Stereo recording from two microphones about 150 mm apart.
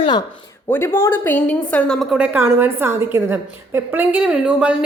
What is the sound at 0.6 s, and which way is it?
A woman's voice, 15° left (ahead or behind).